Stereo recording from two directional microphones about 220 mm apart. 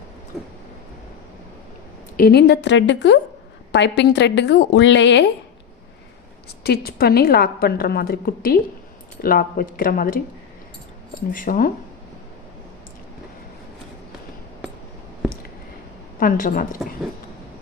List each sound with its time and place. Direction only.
0.3 s a sound: centre (ahead or behind)
2.1 s a woman's voice: 45° left (ahead or behind)
6.6 s a woman's voice: 45° left (ahead or behind)
11.3 s speech: 40° left (ahead or behind)
16.2 s speech: 40° left (ahead or behind)